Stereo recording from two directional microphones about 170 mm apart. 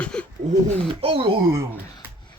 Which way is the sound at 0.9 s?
30° right (ahead or behind).